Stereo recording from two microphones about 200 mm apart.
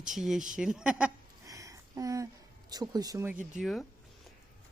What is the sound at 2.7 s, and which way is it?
Speech, 20° right (ahead or behind).